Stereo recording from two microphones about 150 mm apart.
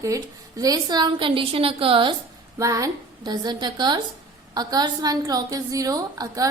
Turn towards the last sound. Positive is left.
turn(degrees=-25)  # may be behind; listen again after turning